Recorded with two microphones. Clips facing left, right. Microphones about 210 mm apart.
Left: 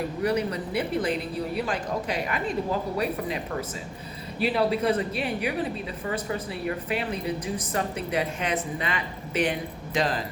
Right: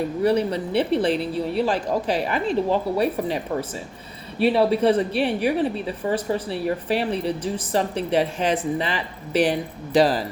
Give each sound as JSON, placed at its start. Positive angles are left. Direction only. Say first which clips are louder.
{"t": 0.2, "sound": "a woman's voice", "louder": "right 6 dB", "side_deg": -30}
{"t": 4.5, "sound": "a woman's voice", "louder": "right 5 dB", "side_deg": -30}